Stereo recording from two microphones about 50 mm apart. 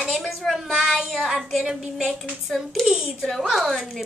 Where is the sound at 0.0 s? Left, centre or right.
Centre.